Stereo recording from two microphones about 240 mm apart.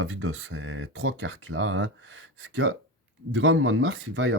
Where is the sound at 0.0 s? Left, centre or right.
Right.